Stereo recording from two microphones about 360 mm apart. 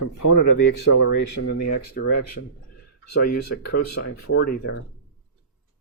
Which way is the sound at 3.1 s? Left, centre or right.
Left.